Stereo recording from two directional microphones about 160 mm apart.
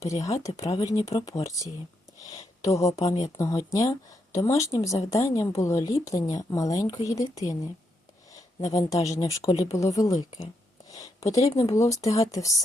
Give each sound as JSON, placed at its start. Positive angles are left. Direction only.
{"t": 0.0, "sound": "speech", "side_deg": 20}
{"t": 0.7, "sound": "speech", "side_deg": 35}
{"t": 1.4, "sound": "speech", "side_deg": 20}
{"t": 8.6, "sound": "speech", "side_deg": 20}